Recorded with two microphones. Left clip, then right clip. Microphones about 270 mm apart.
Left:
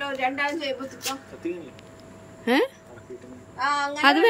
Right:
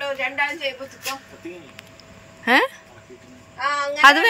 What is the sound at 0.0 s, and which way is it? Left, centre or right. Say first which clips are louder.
Speech: right 2 dB; centre.